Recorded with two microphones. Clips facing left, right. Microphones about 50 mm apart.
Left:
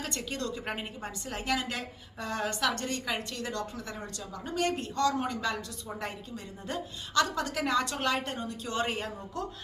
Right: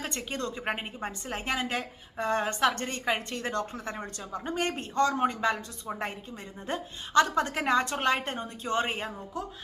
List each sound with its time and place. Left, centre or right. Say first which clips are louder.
0.0 s a woman's voice: right 1 dB; right